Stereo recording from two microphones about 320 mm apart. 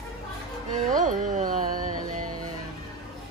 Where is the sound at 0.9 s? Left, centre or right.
Right.